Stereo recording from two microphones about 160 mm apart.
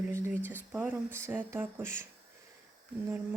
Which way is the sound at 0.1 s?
15° right (ahead or behind).